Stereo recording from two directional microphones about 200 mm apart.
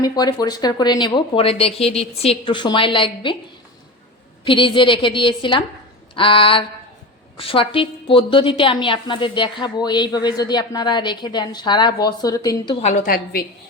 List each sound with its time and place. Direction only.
0.0 s a woman's voice: 20° left (ahead or behind)
4.4 s a woman's voice: 25° left (ahead or behind)
12.8 s a woman's voice: 40° left (ahead or behind)